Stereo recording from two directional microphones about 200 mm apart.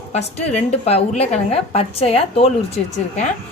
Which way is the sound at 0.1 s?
35° left (ahead or behind).